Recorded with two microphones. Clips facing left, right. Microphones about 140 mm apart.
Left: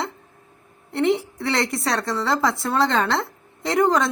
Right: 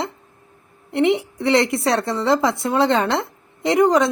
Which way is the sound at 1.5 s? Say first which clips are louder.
Right 6 dB; centre (ahead or behind).